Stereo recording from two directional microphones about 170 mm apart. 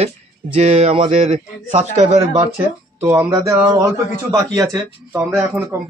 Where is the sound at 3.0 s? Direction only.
20° right (ahead or behind).